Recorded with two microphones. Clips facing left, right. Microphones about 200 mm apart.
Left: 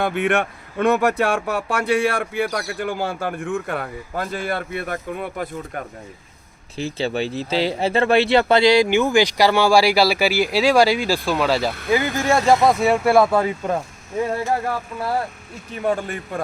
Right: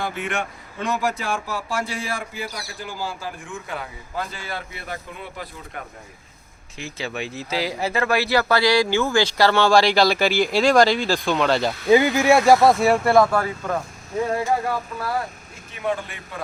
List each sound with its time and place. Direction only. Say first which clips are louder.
0.0 s speech: left 7 dB; 60° left (ahead or behind)
6.7 s speech: left 7 dB; 30° left (ahead or behind); by 11.7 s 5° left (ahead or behind)
11.9 s speech: right 6 dB; 20° right (ahead or behind)
12.2 s speech: right 2 dB; 10° right (ahead or behind); by 13.3 s 5° left (ahead or behind)
13.3 s speech: left 4 dB; 20° left (ahead or behind)
15.8 s speech: left 4 dB; 45° left (ahead or behind)